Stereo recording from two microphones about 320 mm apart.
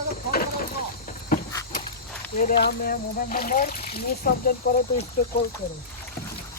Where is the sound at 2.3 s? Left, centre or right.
Left.